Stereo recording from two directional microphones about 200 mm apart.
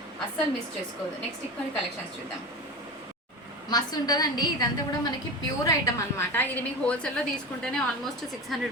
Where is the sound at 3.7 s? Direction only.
20° left (ahead or behind).